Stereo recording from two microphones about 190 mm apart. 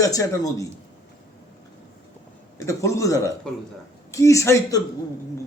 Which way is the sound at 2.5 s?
15° left (ahead or behind).